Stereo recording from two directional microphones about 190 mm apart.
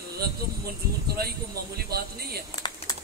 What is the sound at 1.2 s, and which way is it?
A man's voice, 55° right (ahead or behind).